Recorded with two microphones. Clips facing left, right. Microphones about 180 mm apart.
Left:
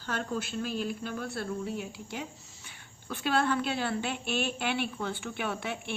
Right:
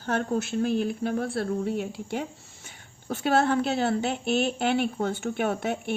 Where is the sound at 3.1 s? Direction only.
45° right (ahead or behind).